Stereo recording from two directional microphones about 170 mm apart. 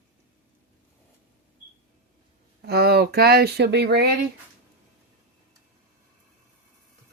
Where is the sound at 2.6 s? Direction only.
70° right (ahead or behind).